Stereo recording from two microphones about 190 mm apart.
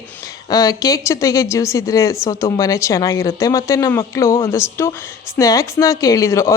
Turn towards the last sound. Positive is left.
turn(degrees=15)  # may be behind; listen again after turning